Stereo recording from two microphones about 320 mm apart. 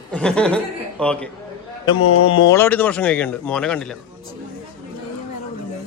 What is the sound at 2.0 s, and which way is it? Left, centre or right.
Speech, left.